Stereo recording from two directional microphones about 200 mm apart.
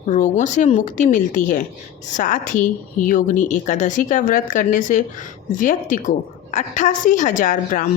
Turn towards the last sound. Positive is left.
turn(degrees=40)  # may be behind; listen again after turning